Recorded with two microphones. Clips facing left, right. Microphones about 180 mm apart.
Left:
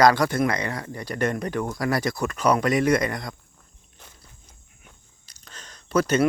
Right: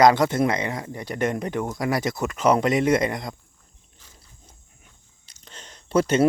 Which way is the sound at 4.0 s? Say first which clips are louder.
Left 6 dB; 65° left (ahead or behind).